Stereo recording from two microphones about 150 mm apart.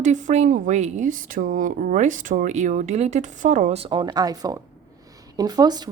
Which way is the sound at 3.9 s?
30° right (ahead or behind).